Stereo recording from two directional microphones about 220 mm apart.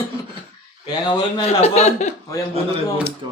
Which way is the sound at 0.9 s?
20° left (ahead or behind).